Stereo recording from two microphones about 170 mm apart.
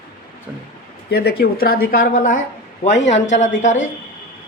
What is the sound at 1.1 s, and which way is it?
Speech, 65° left (ahead or behind).